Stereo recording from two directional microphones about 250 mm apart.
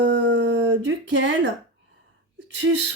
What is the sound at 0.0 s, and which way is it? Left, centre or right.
Howl, right.